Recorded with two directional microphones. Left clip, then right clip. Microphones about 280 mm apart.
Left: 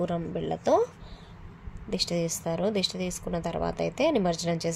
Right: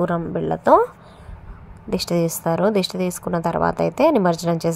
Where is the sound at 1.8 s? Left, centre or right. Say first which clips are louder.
Right 7 dB; right.